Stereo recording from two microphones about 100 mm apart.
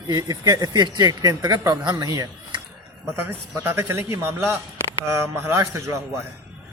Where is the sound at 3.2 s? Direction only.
20° right (ahead or behind).